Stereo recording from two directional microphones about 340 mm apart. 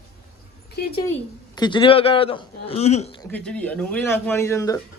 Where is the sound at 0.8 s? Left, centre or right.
Left.